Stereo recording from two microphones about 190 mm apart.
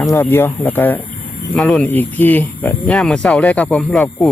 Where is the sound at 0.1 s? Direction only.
10° left (ahead or behind).